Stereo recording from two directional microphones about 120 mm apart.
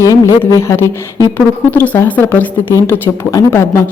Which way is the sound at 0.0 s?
25° left (ahead or behind).